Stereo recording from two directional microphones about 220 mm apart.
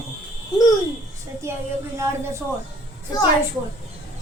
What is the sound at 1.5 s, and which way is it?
Speech, 10° right (ahead or behind).